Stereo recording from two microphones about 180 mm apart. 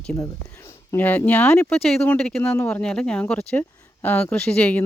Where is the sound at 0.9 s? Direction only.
10° left (ahead or behind).